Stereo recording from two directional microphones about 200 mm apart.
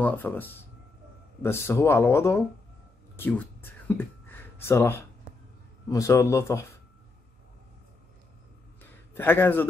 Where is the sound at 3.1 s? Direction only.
10° left (ahead or behind).